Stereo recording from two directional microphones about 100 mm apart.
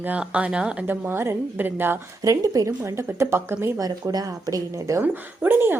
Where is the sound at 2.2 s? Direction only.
35° right (ahead or behind).